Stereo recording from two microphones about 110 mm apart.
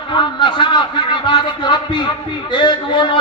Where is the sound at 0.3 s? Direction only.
45° left (ahead or behind).